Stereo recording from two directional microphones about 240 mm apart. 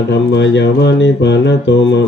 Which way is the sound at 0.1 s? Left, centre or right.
Left.